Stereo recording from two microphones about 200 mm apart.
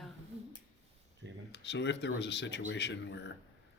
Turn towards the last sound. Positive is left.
turn(degrees=60)  # may be behind; listen again after turning